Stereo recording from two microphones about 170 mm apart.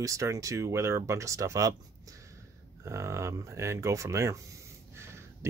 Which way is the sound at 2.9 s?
15° right (ahead or behind).